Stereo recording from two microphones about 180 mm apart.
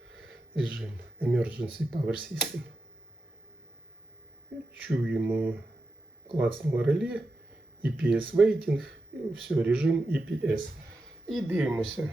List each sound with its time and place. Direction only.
0.1 s speech: centre (ahead or behind)
4.5 s speech: 10° right (ahead or behind)